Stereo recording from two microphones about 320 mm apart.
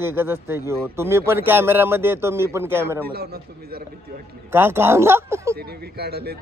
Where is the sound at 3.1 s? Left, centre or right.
Right.